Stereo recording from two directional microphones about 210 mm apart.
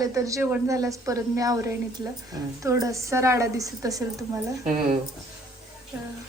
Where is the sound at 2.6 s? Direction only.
15° right (ahead or behind).